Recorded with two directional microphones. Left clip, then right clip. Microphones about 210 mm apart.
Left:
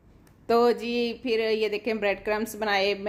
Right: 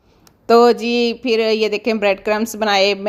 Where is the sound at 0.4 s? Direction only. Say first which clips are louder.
Right 10 dB; 30° right (ahead or behind).